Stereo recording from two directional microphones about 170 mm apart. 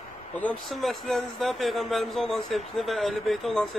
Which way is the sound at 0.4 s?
5° left (ahead or behind).